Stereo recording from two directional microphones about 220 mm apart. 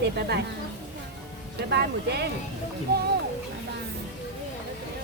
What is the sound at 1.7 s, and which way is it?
Speech, 50° right (ahead or behind).